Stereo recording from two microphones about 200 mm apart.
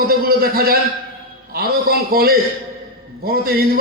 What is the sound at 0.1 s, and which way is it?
A man's voice, 50° right (ahead or behind).